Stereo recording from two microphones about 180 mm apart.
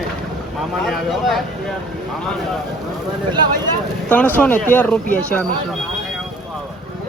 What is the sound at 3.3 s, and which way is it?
Speech, 25° right (ahead or behind).